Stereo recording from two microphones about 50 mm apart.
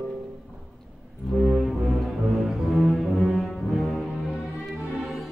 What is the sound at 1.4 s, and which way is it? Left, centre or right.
Music, centre.